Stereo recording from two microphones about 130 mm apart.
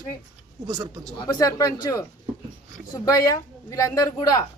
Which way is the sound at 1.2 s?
25° left (ahead or behind).